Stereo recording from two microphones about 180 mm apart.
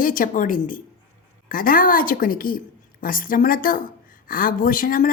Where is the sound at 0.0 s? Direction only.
50° left (ahead or behind).